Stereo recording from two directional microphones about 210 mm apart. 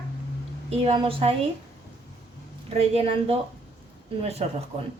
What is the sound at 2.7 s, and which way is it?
A woman's voice, 30° right (ahead or behind).